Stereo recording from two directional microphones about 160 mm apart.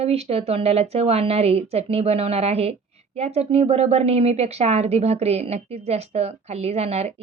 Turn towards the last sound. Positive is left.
turn(degrees=-40)  # may be behind; listen again after turning